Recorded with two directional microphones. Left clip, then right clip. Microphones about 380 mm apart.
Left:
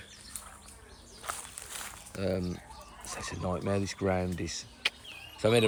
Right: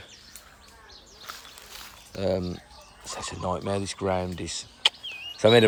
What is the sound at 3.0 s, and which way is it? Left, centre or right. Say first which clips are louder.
Speech: right 6 dB; centre.